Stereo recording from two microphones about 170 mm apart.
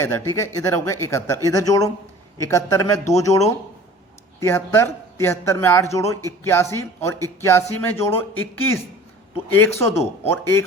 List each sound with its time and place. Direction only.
0.0 s a man's voice: 15° left (ahead or behind)